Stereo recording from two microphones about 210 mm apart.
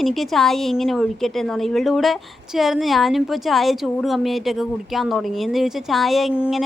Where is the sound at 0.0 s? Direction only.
Centre (ahead or behind).